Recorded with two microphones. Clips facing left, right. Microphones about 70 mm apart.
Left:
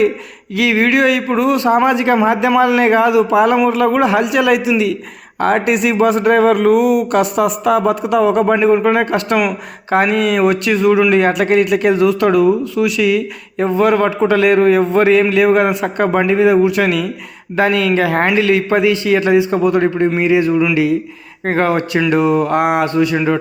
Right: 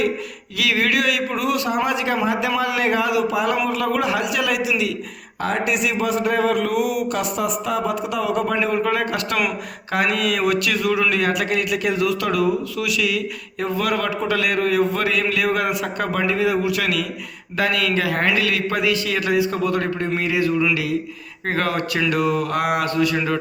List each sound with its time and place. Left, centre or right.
0.5 s a man's voice: left